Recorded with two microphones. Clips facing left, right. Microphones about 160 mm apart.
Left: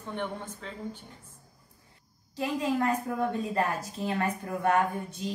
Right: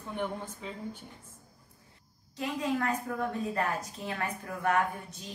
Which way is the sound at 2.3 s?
30° left (ahead or behind).